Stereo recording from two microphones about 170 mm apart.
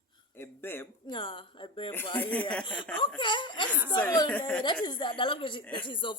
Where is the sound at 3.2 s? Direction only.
30° left (ahead or behind).